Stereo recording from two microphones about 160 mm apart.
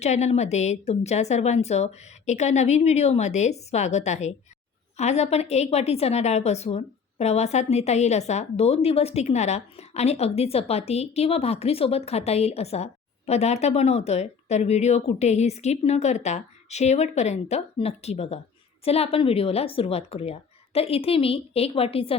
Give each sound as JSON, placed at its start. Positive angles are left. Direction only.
{"t": 0.0, "sound": "a woman's voice", "side_deg": 45}